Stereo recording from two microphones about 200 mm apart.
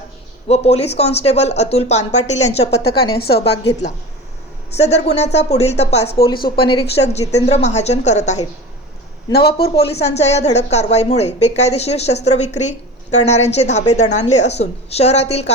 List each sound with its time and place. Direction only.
0.4 s a woman's voice: 30° left (ahead or behind)
3.2 s a woman's voice: 55° left (ahead or behind)
4.8 s a woman's voice: 35° left (ahead or behind)
9.6 s a woman's voice: 30° left (ahead or behind)